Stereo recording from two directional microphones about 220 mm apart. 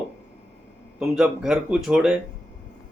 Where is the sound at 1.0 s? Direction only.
Centre (ahead or behind).